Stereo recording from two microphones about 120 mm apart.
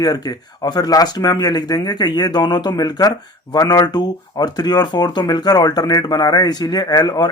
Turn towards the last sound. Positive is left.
turn(degrees=35)  # may be behind; listen again after turning